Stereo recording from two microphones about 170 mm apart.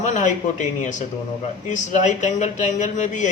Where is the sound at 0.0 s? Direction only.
45° left (ahead or behind).